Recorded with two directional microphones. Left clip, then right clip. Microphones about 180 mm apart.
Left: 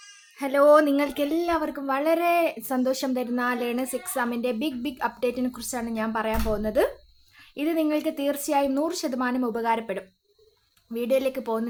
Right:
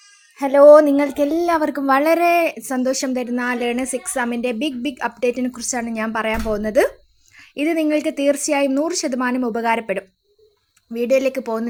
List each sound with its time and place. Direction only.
0.3 s speech: 20° right (ahead or behind)
1.4 s speech: 40° right (ahead or behind)